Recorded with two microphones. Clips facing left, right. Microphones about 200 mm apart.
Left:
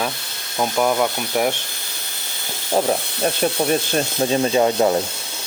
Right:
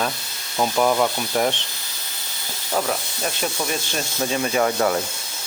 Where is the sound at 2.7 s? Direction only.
30° left (ahead or behind).